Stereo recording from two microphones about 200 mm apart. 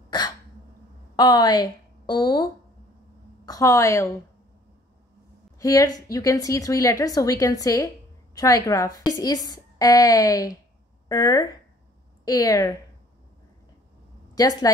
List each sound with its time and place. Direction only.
1.1 s a woman's voice: 20° left (ahead or behind)
5.6 s a woman's voice: 15° left (ahead or behind)
14.3 s speech: 20° left (ahead or behind)